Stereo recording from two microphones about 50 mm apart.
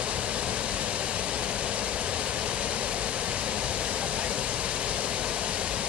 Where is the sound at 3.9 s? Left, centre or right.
Right.